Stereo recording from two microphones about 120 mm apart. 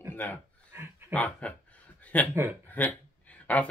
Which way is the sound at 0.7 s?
20° right (ahead or behind).